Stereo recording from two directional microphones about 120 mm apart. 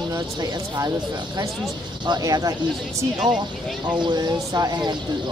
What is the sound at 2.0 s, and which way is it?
Speech, 35° right (ahead or behind).